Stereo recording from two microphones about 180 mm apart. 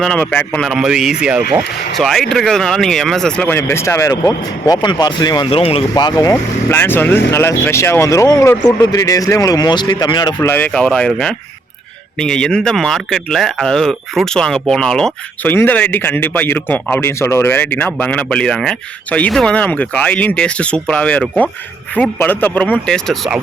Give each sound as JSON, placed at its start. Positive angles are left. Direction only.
{"t": 0.0, "sound": "speech", "side_deg": 5}
{"t": 10.5, "sound": "speech", "side_deg": 5}